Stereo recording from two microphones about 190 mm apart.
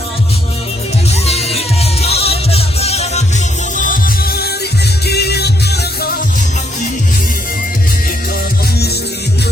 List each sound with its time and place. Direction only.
1.1 s music: 35° left (ahead or behind)
3.8 s music: 45° left (ahead or behind)